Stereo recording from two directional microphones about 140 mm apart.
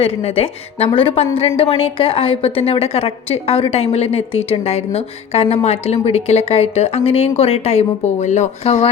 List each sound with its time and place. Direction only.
0.0 s a woman's voice: 45° left (ahead or behind)